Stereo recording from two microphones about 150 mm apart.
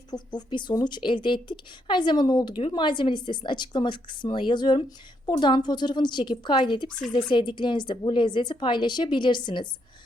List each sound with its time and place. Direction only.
0.3 s a woman's voice: 25° left (ahead or behind)